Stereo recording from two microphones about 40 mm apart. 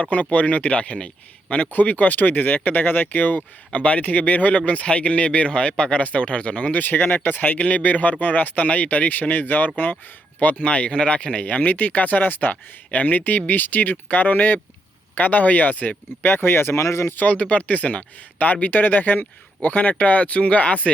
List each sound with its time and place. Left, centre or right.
0.0 s speech: left
1.7 s speech: left
3.7 s speech: left
6.7 s speech: left
7.6 s speech: left
10.6 s speech: left
11.4 s speech: left
16.2 s speech: left
17.2 s speech: left